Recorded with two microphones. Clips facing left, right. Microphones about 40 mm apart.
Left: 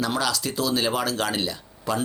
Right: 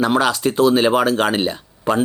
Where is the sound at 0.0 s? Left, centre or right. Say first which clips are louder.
Right 9 dB; right.